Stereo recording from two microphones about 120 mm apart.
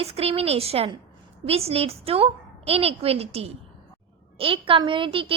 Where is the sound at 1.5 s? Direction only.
55° right (ahead or behind).